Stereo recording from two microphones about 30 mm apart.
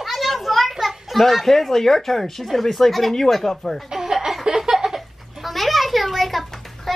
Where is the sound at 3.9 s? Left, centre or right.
Centre.